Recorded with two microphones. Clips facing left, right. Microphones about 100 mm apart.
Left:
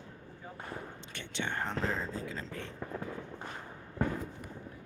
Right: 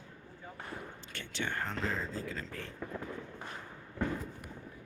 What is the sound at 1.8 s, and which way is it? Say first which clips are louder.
Speech: even; centre (ahead or behind).